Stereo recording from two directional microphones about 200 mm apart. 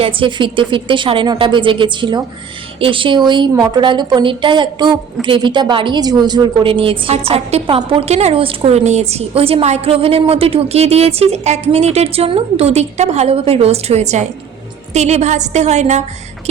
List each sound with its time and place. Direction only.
0.0 s a woman's voice: 25° right (ahead or behind)